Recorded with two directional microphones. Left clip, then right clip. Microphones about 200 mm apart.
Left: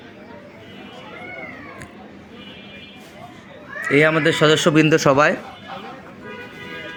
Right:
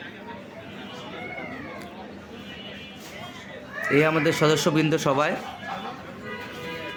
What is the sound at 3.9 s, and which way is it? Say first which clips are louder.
Speech: left 5 dB; 10° left (ahead or behind).